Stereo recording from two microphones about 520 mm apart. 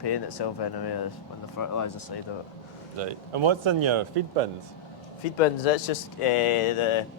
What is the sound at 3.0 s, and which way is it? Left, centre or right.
Speech, right.